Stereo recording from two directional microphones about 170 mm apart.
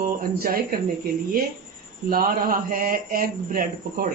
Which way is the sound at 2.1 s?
55° right (ahead or behind).